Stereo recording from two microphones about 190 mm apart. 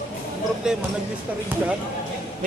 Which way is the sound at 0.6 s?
5° right (ahead or behind).